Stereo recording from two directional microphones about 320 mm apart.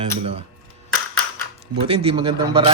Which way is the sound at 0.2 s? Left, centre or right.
Centre.